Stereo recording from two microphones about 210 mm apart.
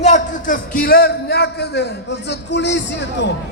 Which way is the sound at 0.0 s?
35° left (ahead or behind).